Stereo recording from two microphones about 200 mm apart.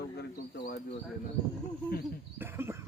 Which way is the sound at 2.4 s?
10° right (ahead or behind).